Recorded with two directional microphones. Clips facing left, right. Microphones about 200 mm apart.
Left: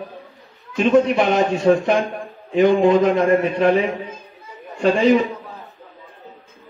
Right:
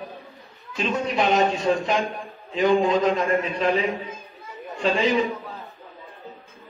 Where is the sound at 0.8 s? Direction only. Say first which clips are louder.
Left 9 dB; 55° left (ahead or behind).